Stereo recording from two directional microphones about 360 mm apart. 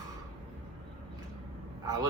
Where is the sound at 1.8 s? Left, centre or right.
Centre.